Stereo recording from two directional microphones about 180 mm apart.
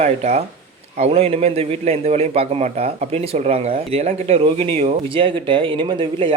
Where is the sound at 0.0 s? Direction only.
35° right (ahead or behind).